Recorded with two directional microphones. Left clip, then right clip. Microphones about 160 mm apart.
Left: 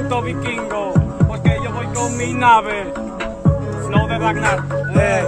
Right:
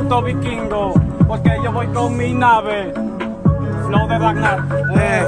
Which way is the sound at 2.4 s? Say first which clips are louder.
Left 1 dB; 5° left (ahead or behind).